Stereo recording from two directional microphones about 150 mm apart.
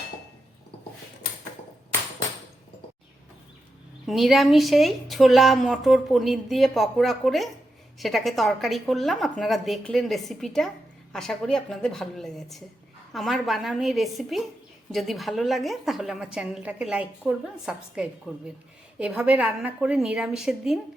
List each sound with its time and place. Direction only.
4.0 s a woman's voice: centre (ahead or behind)